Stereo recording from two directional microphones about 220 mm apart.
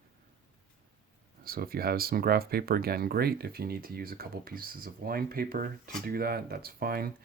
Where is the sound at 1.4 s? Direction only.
40° right (ahead or behind).